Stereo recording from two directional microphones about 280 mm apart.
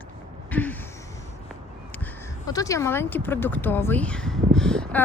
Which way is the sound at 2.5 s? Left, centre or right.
Centre.